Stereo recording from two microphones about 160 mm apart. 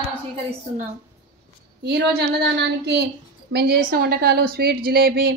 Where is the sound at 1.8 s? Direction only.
90° right.